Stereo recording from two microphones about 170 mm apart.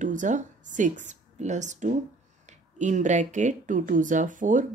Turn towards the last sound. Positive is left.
turn(degrees=-50)  # may be behind; listen again after turning